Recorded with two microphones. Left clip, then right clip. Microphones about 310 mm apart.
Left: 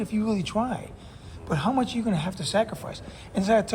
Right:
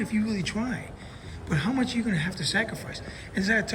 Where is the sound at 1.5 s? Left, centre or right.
Centre.